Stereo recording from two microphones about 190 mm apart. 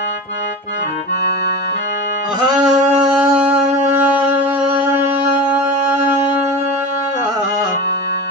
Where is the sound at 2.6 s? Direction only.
5° right (ahead or behind).